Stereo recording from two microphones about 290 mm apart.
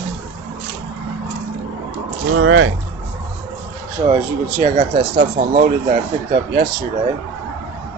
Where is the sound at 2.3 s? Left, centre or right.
Right.